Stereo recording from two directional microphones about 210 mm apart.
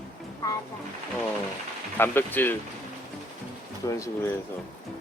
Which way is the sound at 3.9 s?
15° left (ahead or behind).